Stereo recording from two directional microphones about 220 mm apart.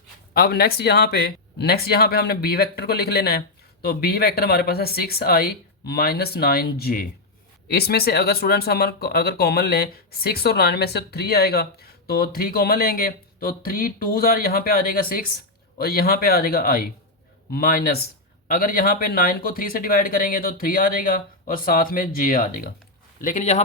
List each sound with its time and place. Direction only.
0.3 s a man's voice: 45° left (ahead or behind)